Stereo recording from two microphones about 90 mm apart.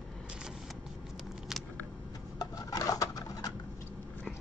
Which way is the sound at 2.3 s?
40° left (ahead or behind).